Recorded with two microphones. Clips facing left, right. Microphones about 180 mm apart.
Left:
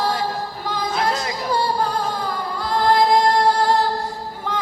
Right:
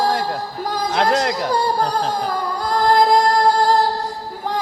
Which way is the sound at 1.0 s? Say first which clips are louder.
Right 7 dB; 70° right (ahead or behind).